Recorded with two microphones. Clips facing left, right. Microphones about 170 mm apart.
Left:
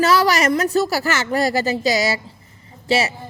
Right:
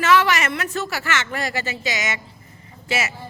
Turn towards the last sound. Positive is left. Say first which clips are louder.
# left 6 dB
turn(degrees=35)  # may be behind; listen again after turning